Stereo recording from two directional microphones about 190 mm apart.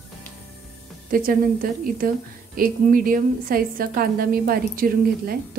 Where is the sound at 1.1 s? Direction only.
50° right (ahead or behind).